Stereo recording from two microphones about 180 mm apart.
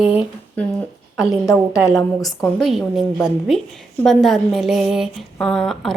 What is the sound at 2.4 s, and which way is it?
A woman's voice, centre (ahead or behind).